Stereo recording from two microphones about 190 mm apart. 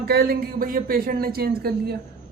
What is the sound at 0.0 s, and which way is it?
Speech, 55° right (ahead or behind).